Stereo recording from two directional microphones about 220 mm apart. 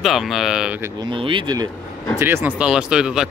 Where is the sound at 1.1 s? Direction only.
20° right (ahead or behind).